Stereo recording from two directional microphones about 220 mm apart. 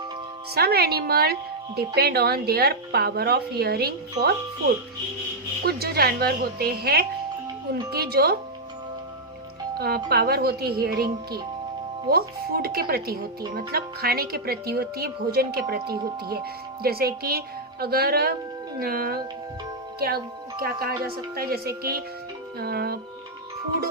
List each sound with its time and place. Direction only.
0.5 s a woman's voice: 45° right (ahead or behind)
5.6 s a woman's voice: 45° right (ahead or behind)
9.7 s a woman's voice: 45° right (ahead or behind)